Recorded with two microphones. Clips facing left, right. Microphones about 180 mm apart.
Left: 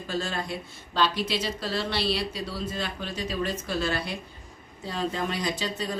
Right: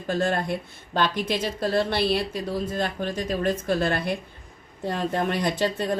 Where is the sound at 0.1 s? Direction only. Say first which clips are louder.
Right 7 dB; 55° right (ahead or behind).